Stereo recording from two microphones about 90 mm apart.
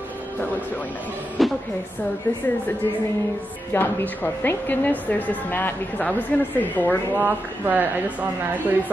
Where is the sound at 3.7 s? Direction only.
20° left (ahead or behind).